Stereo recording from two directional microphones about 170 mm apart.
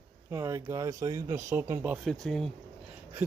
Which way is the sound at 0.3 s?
15° right (ahead or behind).